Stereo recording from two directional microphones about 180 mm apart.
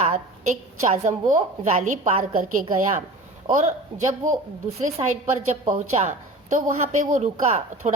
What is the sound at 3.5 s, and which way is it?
Speech, 40° right (ahead or behind).